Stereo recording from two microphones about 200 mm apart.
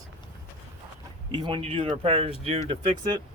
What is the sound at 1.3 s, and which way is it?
Speech, 25° right (ahead or behind).